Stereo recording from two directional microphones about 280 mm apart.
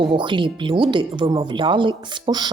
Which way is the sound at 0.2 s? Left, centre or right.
Centre.